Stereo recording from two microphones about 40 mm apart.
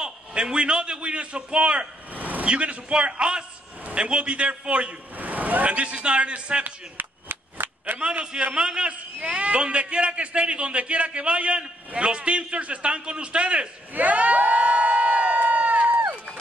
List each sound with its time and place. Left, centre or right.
0.0 s a man's voice: right
2.1 s vehicle: right
2.4 s a man's voice: right
5.1 s speech: right
6.6 s a sound: right
8.4 s a man's voice: right
13.9 s crowd: right